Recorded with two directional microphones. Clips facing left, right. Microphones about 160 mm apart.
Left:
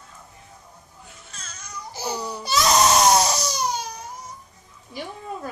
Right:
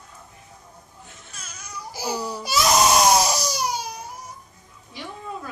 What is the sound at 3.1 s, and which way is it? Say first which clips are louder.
Crying: even; 10° right (ahead or behind).